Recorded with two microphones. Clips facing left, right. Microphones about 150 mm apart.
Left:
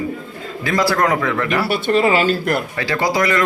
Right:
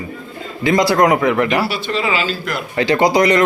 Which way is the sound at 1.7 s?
55° left (ahead or behind).